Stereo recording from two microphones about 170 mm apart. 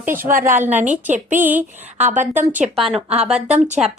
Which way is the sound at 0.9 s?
45° right (ahead or behind).